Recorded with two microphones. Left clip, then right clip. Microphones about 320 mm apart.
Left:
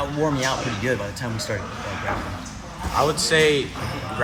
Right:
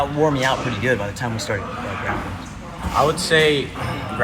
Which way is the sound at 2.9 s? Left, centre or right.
Centre.